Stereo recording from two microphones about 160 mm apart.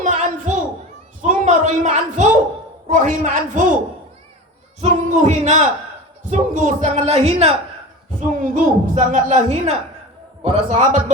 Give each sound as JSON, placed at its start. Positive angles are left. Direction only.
{"t": 0.0, "sound": "a sound", "side_deg": -50}
{"t": 2.8, "sound": "speech", "side_deg": -50}
{"t": 4.8, "sound": "speech", "side_deg": -45}
{"t": 8.4, "sound": "speech", "side_deg": -55}